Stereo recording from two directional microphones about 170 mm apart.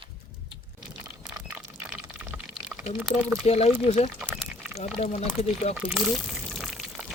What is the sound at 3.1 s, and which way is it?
Speech, 25° left (ahead or behind).